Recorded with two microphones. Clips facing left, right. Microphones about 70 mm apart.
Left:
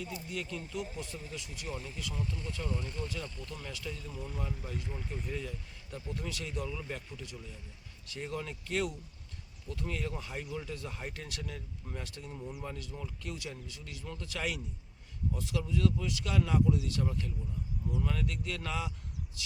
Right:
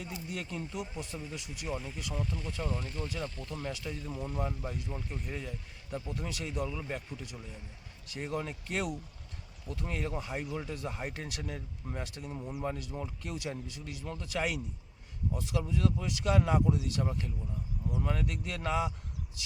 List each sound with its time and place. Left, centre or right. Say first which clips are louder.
0.3 s speech: right 1 dB; right
3.0 s speech: right 2 dB; right
3.4 s speech: right 4 dB; right
4.1 s speech: right 5 dB; centre
4.4 s speech: right 3 dB; right
5.3 s speech: left 1 dB; centre
15.5 s speech: even; right